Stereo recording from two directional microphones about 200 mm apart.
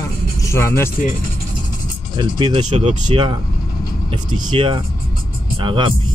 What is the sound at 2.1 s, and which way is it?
Speech, 25° right (ahead or behind).